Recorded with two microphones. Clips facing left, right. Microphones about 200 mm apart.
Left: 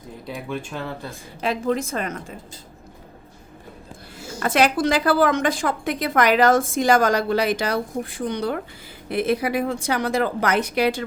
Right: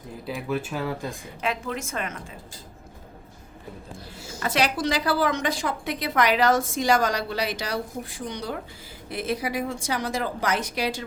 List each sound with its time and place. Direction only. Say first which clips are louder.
0.3 s speech: right 2 dB; 5° right (ahead or behind)
1.4 s a woman's voice: left 7 dB; 35° left (ahead or behind)
4.4 s a woman's voice: left 5 dB; 50° left (ahead or behind)